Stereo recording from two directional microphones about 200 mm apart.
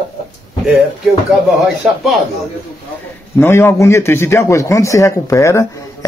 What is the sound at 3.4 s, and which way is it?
A man's voice, 10° left (ahead or behind).